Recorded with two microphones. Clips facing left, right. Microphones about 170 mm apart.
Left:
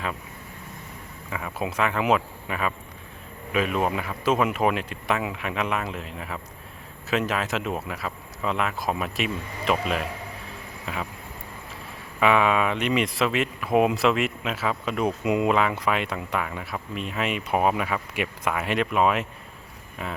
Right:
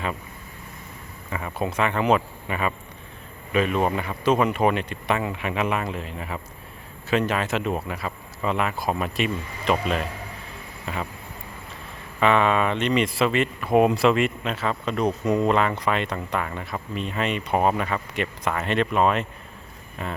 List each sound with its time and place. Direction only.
1.3 s speech: centre (ahead or behind)
12.2 s speech: 5° left (ahead or behind)